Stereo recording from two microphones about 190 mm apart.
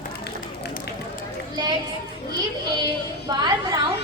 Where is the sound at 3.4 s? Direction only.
25° right (ahead or behind).